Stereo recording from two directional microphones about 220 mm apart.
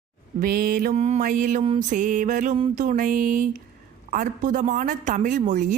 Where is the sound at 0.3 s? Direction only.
40° right (ahead or behind).